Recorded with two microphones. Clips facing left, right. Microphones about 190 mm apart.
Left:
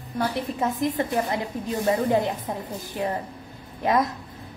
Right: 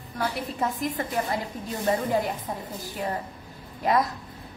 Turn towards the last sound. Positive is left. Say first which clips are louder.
# left 1 dB
turn(degrees=20)  # may be behind; listen again after turning